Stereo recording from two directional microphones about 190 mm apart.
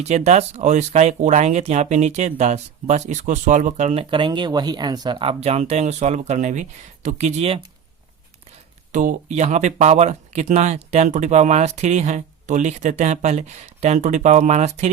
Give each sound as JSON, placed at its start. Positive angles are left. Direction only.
{"t": 0.0, "sound": "speech", "side_deg": -35}
{"t": 8.9, "sound": "speech", "side_deg": -40}